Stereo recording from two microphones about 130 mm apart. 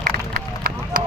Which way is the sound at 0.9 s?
90° right.